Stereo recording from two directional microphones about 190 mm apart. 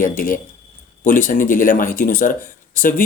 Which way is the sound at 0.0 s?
45° left (ahead or behind).